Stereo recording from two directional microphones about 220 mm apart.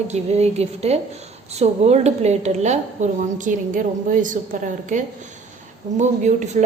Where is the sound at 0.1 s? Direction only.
30° right (ahead or behind).